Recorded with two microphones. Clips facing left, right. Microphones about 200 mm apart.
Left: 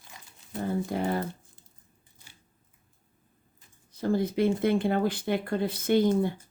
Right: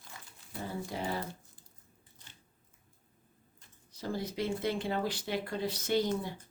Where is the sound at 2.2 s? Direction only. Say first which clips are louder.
Left 2 dB; 10° left (ahead or behind).